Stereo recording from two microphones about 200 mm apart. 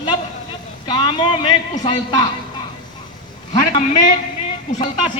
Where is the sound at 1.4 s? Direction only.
25° left (ahead or behind).